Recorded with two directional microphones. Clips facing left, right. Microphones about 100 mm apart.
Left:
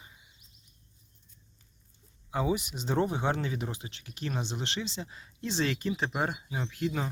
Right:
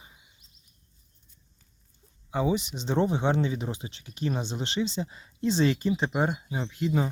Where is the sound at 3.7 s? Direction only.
30° right (ahead or behind).